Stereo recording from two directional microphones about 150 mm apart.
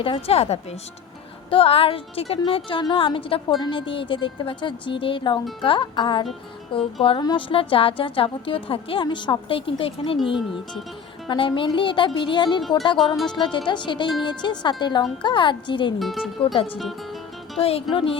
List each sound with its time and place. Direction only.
0.0 s a woman's voice: 40° left (ahead or behind)
13.0 s speech: centre (ahead or behind)
13.4 s speech: 30° left (ahead or behind)
16.0 s speech: centre (ahead or behind)
17.6 s speech: 40° left (ahead or behind)